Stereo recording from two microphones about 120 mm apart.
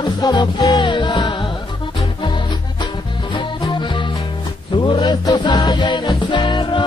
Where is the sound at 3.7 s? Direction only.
40° left (ahead or behind).